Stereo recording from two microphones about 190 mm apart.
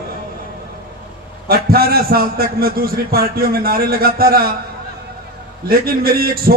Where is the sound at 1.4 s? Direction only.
50° right (ahead or behind).